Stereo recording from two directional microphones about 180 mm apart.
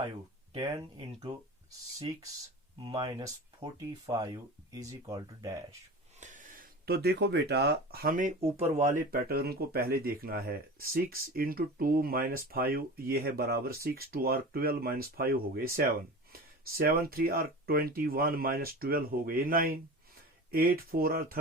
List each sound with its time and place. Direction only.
0.5 s speech: 25° right (ahead or behind)
2.8 s speech: 30° right (ahead or behind)
6.1 s speech: 45° right (ahead or behind)